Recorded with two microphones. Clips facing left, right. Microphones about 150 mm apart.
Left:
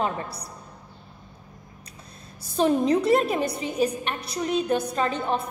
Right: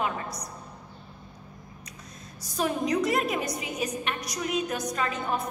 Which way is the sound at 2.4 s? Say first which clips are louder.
Left 7 dB; 30° left (ahead or behind).